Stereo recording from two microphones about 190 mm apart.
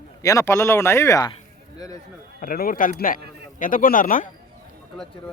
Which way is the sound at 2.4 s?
50° left (ahead or behind).